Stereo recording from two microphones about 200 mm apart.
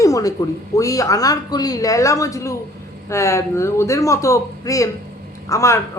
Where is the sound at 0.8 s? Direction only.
15° left (ahead or behind).